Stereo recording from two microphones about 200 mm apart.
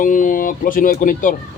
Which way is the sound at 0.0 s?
40° left (ahead or behind).